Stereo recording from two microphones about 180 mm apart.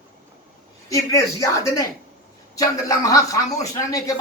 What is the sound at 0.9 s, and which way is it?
A man's voice, 15° left (ahead or behind).